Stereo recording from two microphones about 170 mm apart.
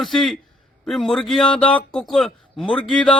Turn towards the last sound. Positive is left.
turn(degrees=5)  # may be behind; listen again after turning